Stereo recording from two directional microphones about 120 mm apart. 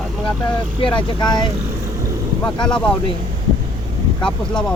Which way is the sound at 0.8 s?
40° left (ahead or behind).